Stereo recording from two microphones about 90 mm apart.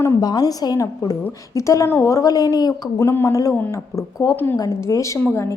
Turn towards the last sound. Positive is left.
turn(degrees=35)  # may be behind; listen again after turning